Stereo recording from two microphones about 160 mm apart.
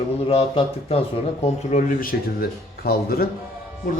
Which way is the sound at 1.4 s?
50° left (ahead or behind).